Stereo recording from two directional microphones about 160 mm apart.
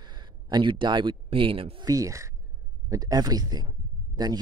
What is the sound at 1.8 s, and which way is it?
Speech, 20° right (ahead or behind).